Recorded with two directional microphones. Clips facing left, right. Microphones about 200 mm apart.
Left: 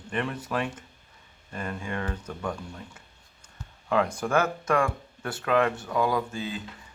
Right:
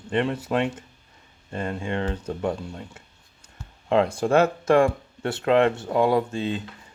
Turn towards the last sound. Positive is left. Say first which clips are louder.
# right 6 dB
turn(degrees=-25)  # may be behind; listen again after turning